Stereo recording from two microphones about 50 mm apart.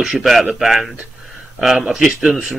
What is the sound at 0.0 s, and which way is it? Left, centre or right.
Speech, centre.